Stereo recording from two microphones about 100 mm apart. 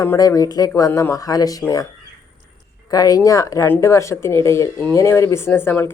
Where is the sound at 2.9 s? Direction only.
40° left (ahead or behind).